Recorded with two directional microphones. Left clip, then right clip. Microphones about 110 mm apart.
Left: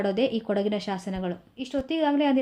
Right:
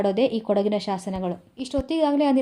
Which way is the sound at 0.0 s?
45° right (ahead or behind).